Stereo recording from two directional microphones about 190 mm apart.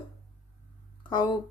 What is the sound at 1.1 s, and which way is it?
Speech, 25° left (ahead or behind).